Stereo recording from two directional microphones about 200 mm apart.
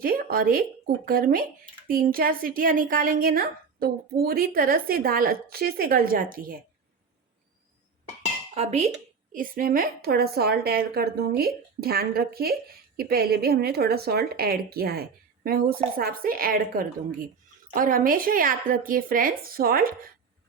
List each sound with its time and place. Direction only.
0.0 s a woman's voice: 45° right (ahead or behind)
8.5 s speech: 30° right (ahead or behind)
9.3 s a woman's voice: 45° right (ahead or behind)